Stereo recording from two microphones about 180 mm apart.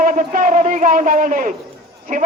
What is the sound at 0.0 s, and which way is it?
A man's voice, 45° right (ahead or behind).